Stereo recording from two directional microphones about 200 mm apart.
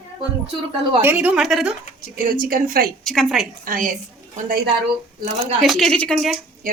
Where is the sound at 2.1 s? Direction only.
45° right (ahead or behind).